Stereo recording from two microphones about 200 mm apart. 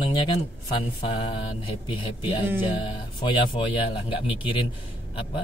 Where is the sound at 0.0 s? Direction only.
25° left (ahead or behind).